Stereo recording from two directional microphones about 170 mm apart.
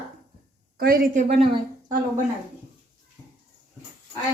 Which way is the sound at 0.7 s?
60° right (ahead or behind).